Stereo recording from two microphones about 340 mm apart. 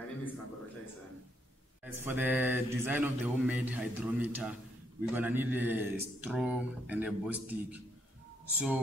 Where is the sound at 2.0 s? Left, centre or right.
Centre.